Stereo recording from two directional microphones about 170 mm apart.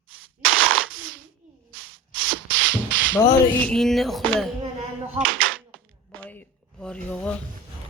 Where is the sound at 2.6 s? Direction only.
90° right.